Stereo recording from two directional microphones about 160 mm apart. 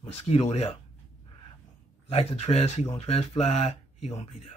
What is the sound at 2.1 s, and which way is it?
Speech, 40° left (ahead or behind).